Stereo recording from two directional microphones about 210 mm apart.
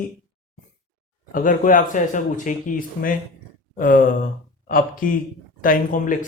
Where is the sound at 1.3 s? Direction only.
40° left (ahead or behind).